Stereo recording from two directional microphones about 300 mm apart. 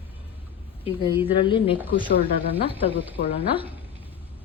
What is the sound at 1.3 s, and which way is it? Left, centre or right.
Speech, centre.